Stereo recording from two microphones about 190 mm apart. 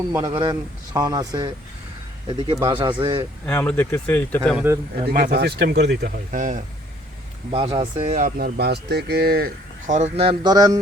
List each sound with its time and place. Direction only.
0.2 s speech: 25° right (ahead or behind)
3.4 s speech: 10° left (ahead or behind)
4.4 s a man's voice: 10° right (ahead or behind)
5.0 s speech: 55° right (ahead or behind)
6.3 s speech: 45° right (ahead or behind)
7.5 s speech: 30° right (ahead or behind)